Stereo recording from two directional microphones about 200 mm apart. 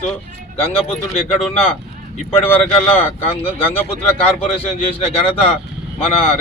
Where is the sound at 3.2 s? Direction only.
30° left (ahead or behind).